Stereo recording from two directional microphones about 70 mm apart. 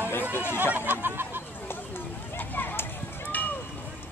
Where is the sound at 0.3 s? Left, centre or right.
Left.